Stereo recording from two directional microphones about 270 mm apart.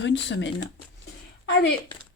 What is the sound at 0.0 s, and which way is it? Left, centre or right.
Speech, left.